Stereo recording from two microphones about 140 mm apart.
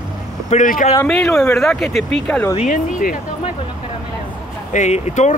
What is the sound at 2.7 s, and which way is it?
Speech, 80° left.